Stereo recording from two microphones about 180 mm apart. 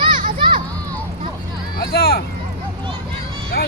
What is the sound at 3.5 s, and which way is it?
Speech, 65° left (ahead or behind).